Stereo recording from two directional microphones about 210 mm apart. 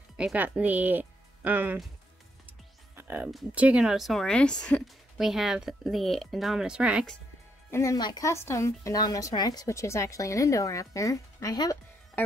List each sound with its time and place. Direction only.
0.2 s speech: 5° right (ahead or behind)
3.0 s music: 10° right (ahead or behind)
3.3 s speech: 5° right (ahead or behind)
7.7 s speech: 15° left (ahead or behind)